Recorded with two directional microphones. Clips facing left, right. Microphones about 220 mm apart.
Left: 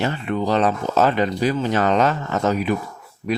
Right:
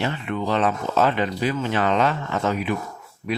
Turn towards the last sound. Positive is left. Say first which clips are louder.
# left 3 dB
turn(degrees=40)  # may be behind; listen again after turning